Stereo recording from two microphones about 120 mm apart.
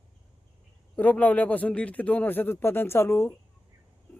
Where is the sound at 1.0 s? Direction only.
15° left (ahead or behind).